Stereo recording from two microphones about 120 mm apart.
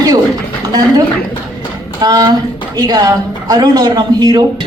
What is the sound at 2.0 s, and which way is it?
A man's voice, 35° right (ahead or behind).